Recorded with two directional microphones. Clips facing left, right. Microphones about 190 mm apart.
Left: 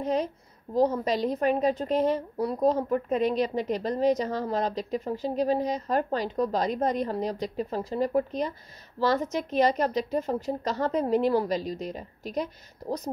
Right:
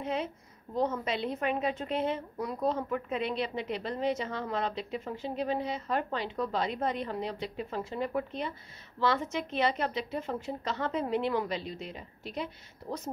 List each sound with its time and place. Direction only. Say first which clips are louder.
0.0 s a woman's voice: left 6 dB; 40° left (ahead or behind)